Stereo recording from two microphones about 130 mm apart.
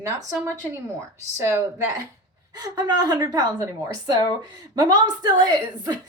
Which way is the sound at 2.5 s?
30° right (ahead or behind).